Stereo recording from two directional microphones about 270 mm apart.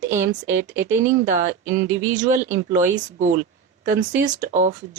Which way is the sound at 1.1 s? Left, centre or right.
Right.